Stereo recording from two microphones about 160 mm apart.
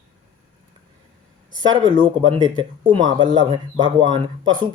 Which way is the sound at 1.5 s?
30° right (ahead or behind).